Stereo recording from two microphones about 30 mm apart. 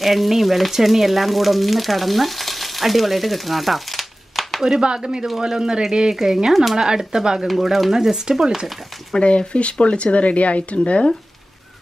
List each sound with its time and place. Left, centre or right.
0.0 s speech: centre
4.7 s speech: right; by 6.8 s centre
6.8 s speech: centre
7.4 s speech: centre
9.5 s speech: left